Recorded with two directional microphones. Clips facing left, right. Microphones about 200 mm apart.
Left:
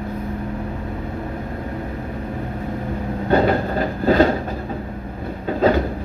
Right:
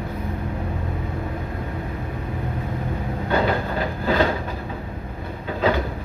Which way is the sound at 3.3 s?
45° left (ahead or behind).